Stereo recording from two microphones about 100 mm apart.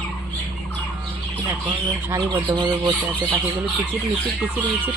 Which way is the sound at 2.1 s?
35° right (ahead or behind).